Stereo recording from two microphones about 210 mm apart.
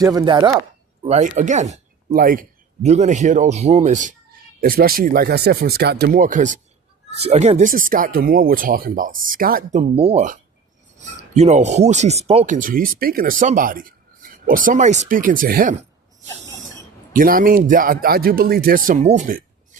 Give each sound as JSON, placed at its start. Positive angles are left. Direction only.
{"t": 0.0, "sound": "speech", "side_deg": -15}
{"t": 1.0, "sound": "speech", "side_deg": -35}
{"t": 6.1, "sound": "speech", "side_deg": -40}
{"t": 11.3, "sound": "speech", "side_deg": -35}
{"t": 17.1, "sound": "speech", "side_deg": -40}